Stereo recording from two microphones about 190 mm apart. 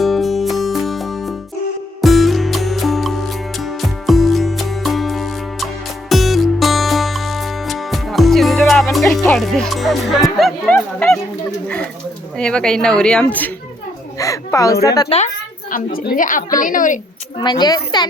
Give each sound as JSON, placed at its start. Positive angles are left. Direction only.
{"t": 0.0, "sound": "music", "side_deg": 0}
{"t": 9.2, "sound": "speech", "side_deg": 0}
{"t": 12.4, "sound": "speech", "side_deg": 5}
{"t": 14.2, "sound": "a woman's voice", "side_deg": 15}
{"t": 15.1, "sound": "speech", "side_deg": 30}
{"t": 15.7, "sound": "a woman's voice", "side_deg": 45}
{"t": 17.4, "sound": "speech", "side_deg": 20}